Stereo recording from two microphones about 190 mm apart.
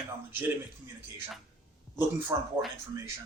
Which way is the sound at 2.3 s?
15° right (ahead or behind).